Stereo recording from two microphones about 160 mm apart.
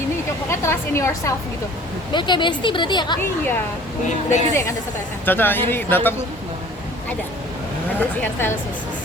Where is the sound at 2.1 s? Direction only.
30° left (ahead or behind).